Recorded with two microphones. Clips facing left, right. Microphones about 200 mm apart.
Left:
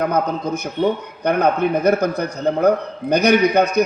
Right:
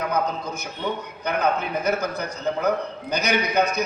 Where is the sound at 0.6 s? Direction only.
55° left (ahead or behind).